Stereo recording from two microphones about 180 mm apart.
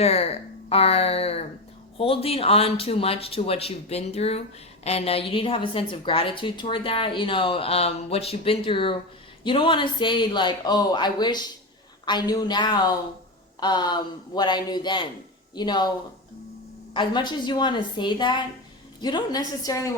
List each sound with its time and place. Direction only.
0.0 s speech: 35° left (ahead or behind)
16.9 s speech: 25° left (ahead or behind)